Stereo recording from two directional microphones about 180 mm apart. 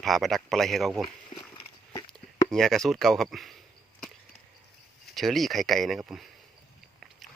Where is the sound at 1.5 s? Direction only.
25° left (ahead or behind).